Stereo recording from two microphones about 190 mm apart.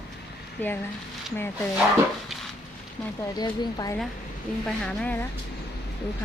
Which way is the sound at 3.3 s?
20° left (ahead or behind).